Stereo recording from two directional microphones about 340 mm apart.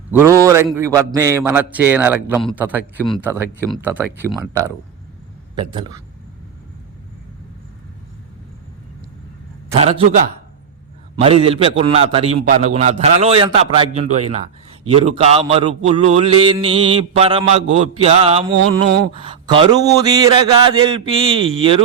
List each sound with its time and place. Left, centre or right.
0.1 s a man's voice: centre
5.7 s a man's voice: centre
9.7 s a man's voice: centre
11.2 s a man's voice: centre